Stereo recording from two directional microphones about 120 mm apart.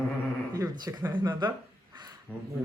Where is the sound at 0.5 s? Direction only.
30° right (ahead or behind).